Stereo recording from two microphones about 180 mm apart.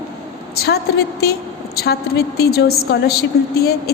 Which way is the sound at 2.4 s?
60° left (ahead or behind).